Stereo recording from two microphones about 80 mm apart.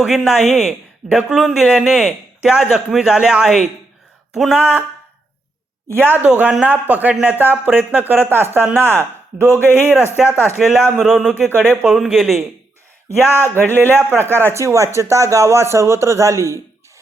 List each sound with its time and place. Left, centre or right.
0.1 s a woman's voice: centre
6.1 s speech: right
10.2 s a woman's voice: centre
11.4 s speech: right
11.9 s a woman's voice: centre
13.1 s a man's voice: right